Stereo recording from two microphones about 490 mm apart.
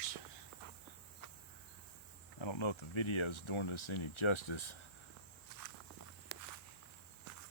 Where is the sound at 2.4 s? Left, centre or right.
Left.